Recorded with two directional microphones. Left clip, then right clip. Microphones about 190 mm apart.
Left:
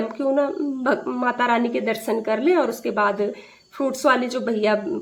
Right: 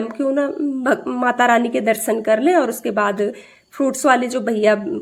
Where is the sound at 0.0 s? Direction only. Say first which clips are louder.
Right 2 dB; 20° right (ahead or behind).